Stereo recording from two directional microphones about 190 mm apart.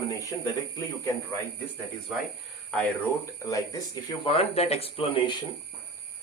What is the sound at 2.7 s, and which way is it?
Speech, 5° left (ahead or behind).